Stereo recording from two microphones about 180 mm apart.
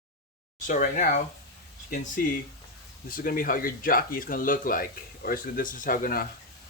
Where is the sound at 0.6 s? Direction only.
45° left (ahead or behind).